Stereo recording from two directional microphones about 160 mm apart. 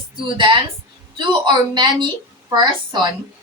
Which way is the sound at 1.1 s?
30° right (ahead or behind).